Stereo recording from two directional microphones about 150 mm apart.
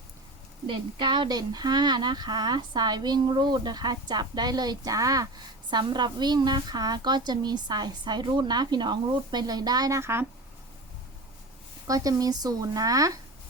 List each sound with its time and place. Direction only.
0.7 s speech: 30° right (ahead or behind)
11.9 s speech: 25° right (ahead or behind)